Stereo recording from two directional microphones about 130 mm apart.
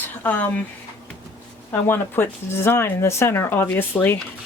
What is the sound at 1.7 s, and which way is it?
Speech, 15° left (ahead or behind).